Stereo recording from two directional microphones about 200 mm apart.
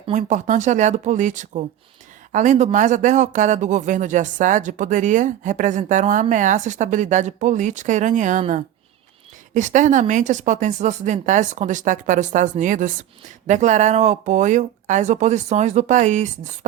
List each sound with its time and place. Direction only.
0.1 s speech: 35° right (ahead or behind)